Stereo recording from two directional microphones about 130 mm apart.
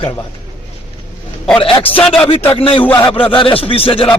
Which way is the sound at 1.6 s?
45° left (ahead or behind).